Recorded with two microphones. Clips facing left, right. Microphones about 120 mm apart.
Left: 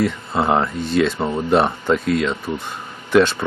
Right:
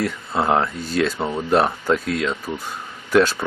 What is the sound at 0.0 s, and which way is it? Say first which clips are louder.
Speech: left 2 dB; centre (ahead or behind).